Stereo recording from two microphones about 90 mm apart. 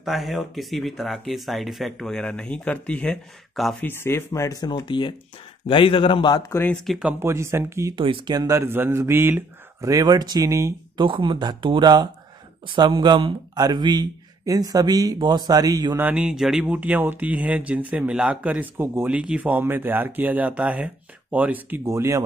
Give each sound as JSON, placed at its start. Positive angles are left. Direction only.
{"t": 0.0, "sound": "speech", "side_deg": 0}
{"t": 3.8, "sound": "speech", "side_deg": 25}
{"t": 4.8, "sound": "speech", "side_deg": 60}
{"t": 5.7, "sound": "a man's voice", "side_deg": 75}
{"t": 7.2, "sound": "speech", "side_deg": -30}
{"t": 7.9, "sound": "speech", "side_deg": -65}
{"t": 8.4, "sound": "speech", "side_deg": -35}
{"t": 9.8, "sound": "speech", "side_deg": -40}
{"t": 11.0, "sound": "speech", "side_deg": -65}
{"t": 14.4, "sound": "speech", "side_deg": -40}
{"t": 16.2, "sound": "speech", "side_deg": -5}
{"t": 21.8, "sound": "speech", "side_deg": -35}